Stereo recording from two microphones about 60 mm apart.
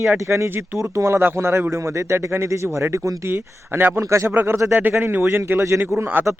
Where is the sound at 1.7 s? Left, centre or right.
Right.